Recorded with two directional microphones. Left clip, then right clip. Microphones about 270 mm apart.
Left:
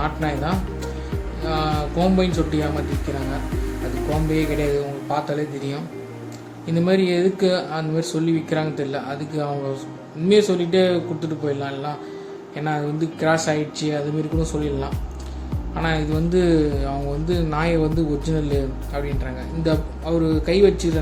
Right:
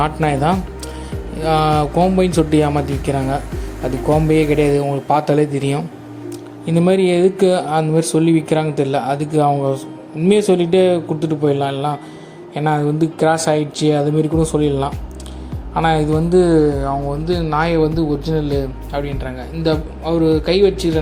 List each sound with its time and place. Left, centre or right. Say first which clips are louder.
0.0 s speech: right 8 dB; right
4.3 s a man's voice: right 6 dB; right; by 21.0 s centre